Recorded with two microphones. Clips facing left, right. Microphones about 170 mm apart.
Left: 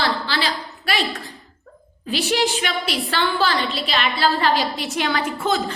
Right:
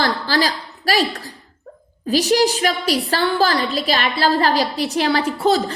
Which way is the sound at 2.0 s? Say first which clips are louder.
Right 5 dB; 40° right (ahead or behind).